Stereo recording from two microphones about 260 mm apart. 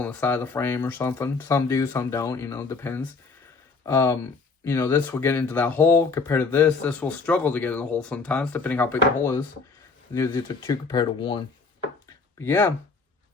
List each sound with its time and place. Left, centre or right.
0.0 s speech: centre
10.2 s speech: centre
12.4 s speech: centre